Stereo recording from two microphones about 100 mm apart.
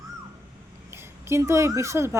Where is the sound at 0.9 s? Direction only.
25° right (ahead or behind).